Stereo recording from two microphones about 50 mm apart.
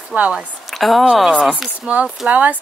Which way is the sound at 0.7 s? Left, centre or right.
Centre.